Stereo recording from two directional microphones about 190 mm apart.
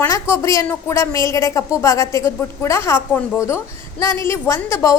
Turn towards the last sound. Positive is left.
turn(degrees=15)  # may be behind; listen again after turning